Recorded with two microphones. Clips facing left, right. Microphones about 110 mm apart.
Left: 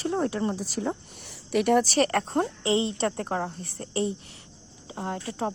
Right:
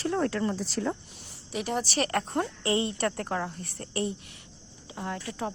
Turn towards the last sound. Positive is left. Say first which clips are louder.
# left 3 dB
turn(degrees=25)  # may be behind; listen again after turning